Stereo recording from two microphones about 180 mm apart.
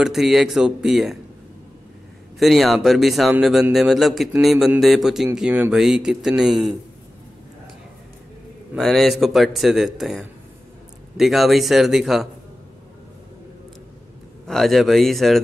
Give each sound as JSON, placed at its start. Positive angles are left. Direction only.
{"t": 0.0, "sound": "speech", "side_deg": 0}
{"t": 2.3, "sound": "speech", "side_deg": 0}
{"t": 8.7, "sound": "speech", "side_deg": 0}
{"t": 14.4, "sound": "speech", "side_deg": 0}